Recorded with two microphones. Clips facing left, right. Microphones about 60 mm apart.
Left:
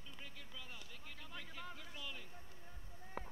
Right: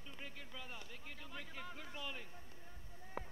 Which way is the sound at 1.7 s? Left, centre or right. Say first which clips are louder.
Right 3 dB; centre.